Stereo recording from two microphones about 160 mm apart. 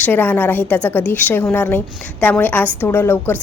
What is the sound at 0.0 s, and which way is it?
A woman's voice, 10° left (ahead or behind).